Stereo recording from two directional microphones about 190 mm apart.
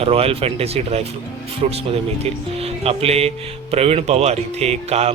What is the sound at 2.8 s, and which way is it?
Speech, 30° right (ahead or behind).